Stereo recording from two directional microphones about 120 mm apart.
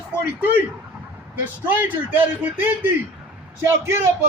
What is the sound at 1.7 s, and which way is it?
A man's voice, 15° right (ahead or behind).